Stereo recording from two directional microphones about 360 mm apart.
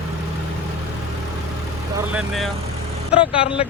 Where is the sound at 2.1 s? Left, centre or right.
Centre.